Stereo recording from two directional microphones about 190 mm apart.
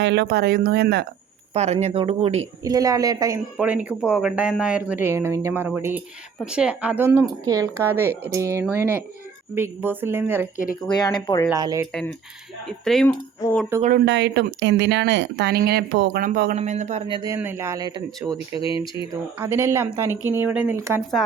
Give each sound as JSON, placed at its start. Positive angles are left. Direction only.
{"t": 0.0, "sound": "speech", "side_deg": -65}
{"t": 1.5, "sound": "speech", "side_deg": -35}
{"t": 2.6, "sound": "a woman's voice", "side_deg": -20}
{"t": 3.6, "sound": "speech", "side_deg": -5}
{"t": 10.8, "sound": "speech", "side_deg": 20}
{"t": 11.5, "sound": "speech", "side_deg": -20}
{"t": 12.6, "sound": "speech", "side_deg": 0}
{"t": 13.1, "sound": "speech", "side_deg": 15}
{"t": 14.0, "sound": "speech", "side_deg": -65}
{"t": 16.6, "sound": "speech", "side_deg": -40}
{"t": 17.1, "sound": "speech", "side_deg": -15}
{"t": 18.5, "sound": "speech", "side_deg": 25}
{"t": 19.4, "sound": "speech", "side_deg": -10}